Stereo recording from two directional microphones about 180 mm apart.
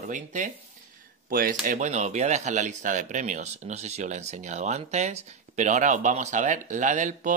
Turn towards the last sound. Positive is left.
turn(degrees=-45)  # may be behind; listen again after turning